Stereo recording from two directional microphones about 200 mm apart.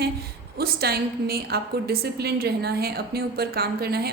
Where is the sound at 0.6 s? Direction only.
50° right (ahead or behind).